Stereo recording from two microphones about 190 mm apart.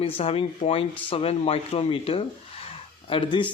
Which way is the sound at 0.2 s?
30° left (ahead or behind).